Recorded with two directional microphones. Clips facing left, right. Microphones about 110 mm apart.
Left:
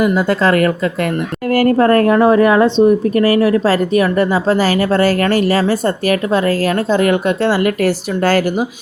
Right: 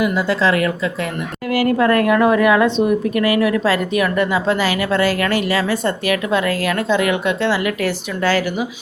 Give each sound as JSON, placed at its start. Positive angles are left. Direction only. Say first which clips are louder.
{"t": 0.0, "sound": "a woman's voice", "louder": "left 4 dB", "side_deg": 50}